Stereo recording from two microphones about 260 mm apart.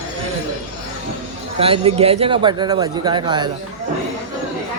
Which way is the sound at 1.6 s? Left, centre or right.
Right.